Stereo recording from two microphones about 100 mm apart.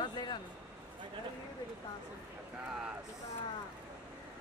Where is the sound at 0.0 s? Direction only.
50° left (ahead or behind).